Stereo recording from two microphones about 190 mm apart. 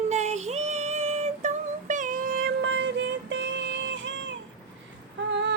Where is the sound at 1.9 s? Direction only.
45° right (ahead or behind).